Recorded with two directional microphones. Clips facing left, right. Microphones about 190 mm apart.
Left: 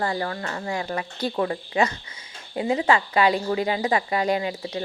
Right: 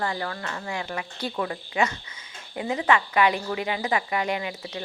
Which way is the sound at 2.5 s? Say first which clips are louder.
Left 2 dB; 25° left (ahead or behind).